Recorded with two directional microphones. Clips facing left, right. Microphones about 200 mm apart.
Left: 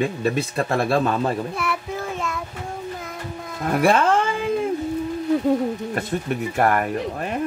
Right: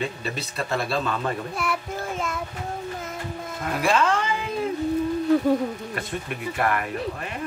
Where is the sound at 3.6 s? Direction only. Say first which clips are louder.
Left 5 dB; 55° left (ahead or behind).